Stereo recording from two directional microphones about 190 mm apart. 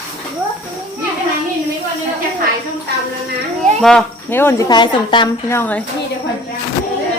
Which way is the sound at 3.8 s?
5° left (ahead or behind).